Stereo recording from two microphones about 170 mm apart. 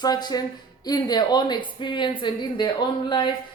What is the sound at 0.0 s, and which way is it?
A woman's voice, 25° left (ahead or behind).